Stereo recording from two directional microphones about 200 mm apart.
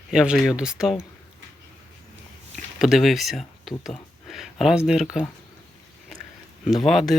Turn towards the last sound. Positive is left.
turn(degrees=0)  # may be behind; listen again after turning